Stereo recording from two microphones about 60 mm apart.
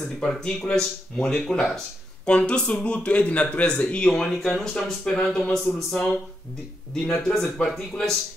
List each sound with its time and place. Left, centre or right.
0.0 s speech: centre
5.4 s speech: centre